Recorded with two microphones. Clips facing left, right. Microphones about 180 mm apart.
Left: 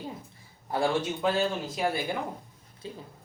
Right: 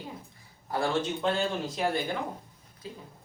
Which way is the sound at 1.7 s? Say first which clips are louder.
Even; 5° left (ahead or behind).